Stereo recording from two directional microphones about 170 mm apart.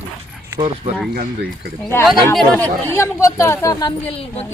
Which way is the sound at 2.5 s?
10° left (ahead or behind).